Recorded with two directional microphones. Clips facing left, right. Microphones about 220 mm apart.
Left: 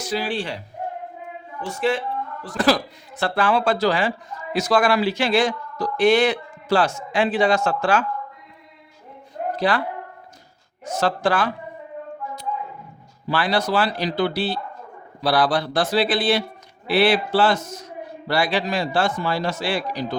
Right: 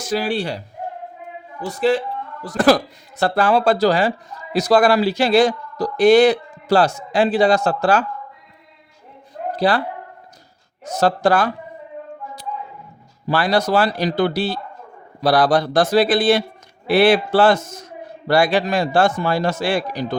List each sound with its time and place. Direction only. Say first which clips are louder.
0.1 s speech: right 5 dB; 40° right (ahead or behind)
1.6 s speech: right 4 dB; 35° right (ahead or behind)
9.6 s speech: right 4 dB; 35° right (ahead or behind)
10.8 s speech: right 4 dB; 40° right (ahead or behind)
13.2 s a man's voice: right 4 dB; 40° right (ahead or behind)